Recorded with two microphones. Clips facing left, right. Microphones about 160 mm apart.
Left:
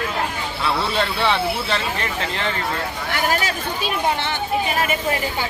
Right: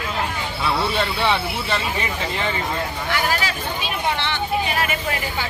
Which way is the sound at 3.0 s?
45° left (ahead or behind).